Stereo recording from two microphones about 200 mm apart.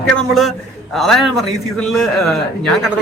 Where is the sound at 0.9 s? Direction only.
Centre (ahead or behind).